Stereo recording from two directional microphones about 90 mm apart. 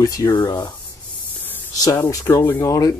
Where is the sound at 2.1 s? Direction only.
30° left (ahead or behind).